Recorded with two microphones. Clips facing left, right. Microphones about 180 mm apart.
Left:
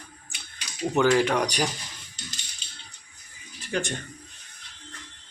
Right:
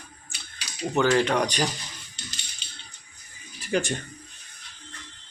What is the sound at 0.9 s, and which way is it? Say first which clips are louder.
Speech: even; 5° left (ahead or behind).